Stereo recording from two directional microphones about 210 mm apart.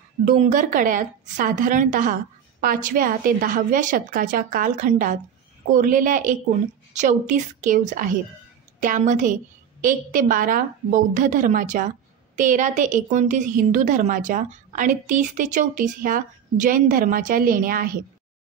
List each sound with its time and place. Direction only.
0.2 s a woman's voice: 40° right (ahead or behind)